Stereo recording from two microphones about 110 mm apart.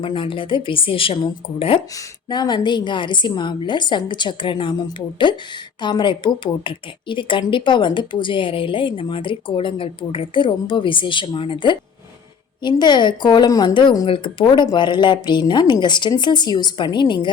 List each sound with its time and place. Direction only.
0.0 s speech: 50° left (ahead or behind)
2.3 s speech: 40° left (ahead or behind)